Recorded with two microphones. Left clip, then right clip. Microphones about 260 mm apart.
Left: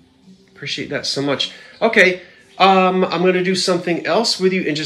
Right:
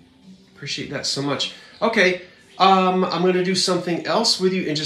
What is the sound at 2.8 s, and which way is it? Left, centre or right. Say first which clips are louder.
Speech: left 4 dB; centre.